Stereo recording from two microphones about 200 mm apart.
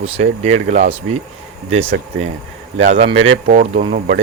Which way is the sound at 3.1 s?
70° right (ahead or behind).